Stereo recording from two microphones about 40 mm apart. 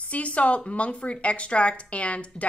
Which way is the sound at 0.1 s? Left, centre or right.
Left.